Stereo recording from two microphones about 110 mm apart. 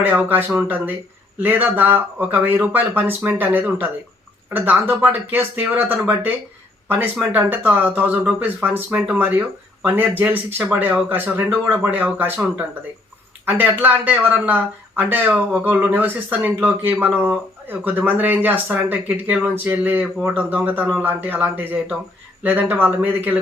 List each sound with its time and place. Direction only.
0.0 s speech: 15° right (ahead or behind)